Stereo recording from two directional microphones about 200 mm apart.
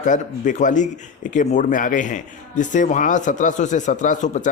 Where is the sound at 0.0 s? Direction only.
40° left (ahead or behind).